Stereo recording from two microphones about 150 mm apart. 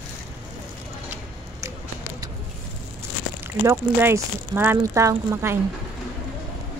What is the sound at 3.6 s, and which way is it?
Speech, 15° right (ahead or behind).